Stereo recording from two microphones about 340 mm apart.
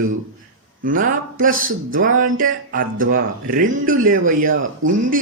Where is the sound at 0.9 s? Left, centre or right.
Right.